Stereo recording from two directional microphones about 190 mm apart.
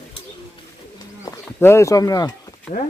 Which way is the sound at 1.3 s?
15° left (ahead or behind).